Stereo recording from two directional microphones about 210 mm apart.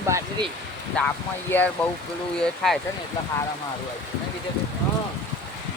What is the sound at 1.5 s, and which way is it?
Speech, 10° left (ahead or behind).